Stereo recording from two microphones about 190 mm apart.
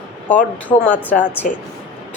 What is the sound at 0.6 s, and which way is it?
Speech, 10° left (ahead or behind).